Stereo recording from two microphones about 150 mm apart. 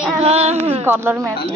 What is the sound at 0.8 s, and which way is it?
Speech, 15° right (ahead or behind).